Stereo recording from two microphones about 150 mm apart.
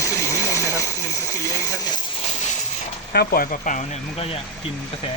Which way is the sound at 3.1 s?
85° left.